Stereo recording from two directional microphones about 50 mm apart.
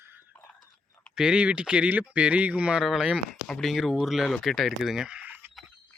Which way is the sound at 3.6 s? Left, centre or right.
Centre.